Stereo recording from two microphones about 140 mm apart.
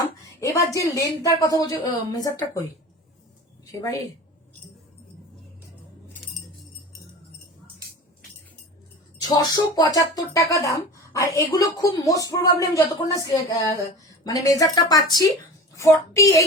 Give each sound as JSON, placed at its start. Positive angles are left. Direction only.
{"t": 0.3, "sound": "speech", "side_deg": 20}
{"t": 3.7, "sound": "speech", "side_deg": 25}
{"t": 9.2, "sound": "speech", "side_deg": 30}